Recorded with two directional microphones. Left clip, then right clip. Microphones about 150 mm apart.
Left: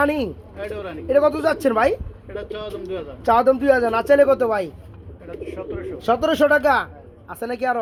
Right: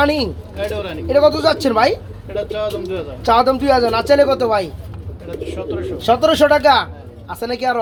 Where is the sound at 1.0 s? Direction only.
45° left (ahead or behind).